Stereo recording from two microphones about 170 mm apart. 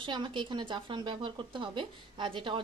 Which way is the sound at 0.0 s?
30° right (ahead or behind).